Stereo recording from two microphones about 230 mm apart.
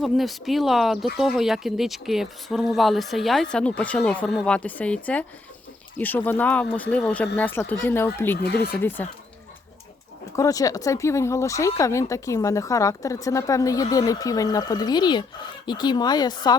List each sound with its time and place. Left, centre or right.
0.0 s a woman's voice: centre
8.4 s speech: left
10.3 s a woman's voice: centre